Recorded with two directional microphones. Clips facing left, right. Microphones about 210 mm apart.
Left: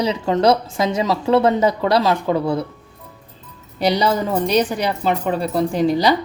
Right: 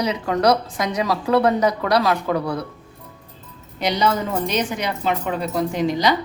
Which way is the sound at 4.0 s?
35° left (ahead or behind).